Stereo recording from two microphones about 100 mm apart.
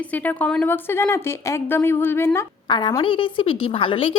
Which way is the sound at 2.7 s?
55° left (ahead or behind).